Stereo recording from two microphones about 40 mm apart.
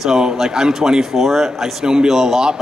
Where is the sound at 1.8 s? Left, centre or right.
Centre.